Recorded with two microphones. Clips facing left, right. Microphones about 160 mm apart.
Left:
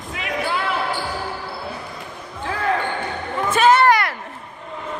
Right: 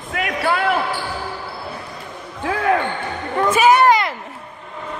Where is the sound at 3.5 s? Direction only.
10° right (ahead or behind).